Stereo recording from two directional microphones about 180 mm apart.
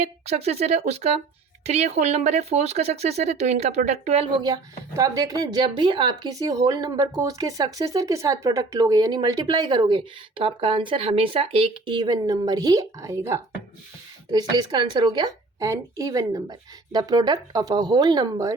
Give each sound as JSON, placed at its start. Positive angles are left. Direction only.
{"t": 0.3, "sound": "speech", "side_deg": -35}